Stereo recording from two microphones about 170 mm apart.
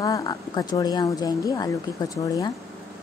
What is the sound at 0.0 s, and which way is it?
Speech, 20° left (ahead or behind).